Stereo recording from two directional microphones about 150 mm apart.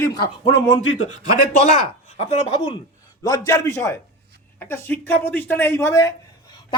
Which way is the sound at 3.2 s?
25° left (ahead or behind).